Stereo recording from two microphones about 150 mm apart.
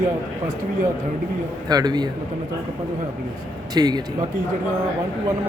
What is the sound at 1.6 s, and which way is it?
Speech, 25° right (ahead or behind).